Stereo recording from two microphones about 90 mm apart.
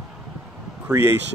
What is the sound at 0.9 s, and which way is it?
Speech, 40° right (ahead or behind).